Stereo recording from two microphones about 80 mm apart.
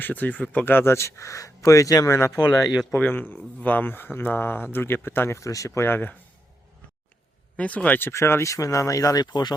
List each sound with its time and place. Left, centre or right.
0.0 s speech: left
2.1 s speech: left
5.4 s speech: left
7.5 s speech: centre; by 9.2 s left
9.2 s speech: left